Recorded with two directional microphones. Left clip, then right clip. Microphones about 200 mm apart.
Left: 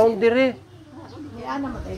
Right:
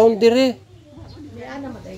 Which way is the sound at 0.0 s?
65° right (ahead or behind).